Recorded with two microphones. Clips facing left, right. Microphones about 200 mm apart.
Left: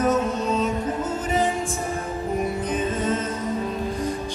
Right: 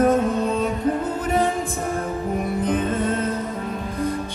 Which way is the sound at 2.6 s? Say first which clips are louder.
Right 2 dB; 60° right (ahead or behind).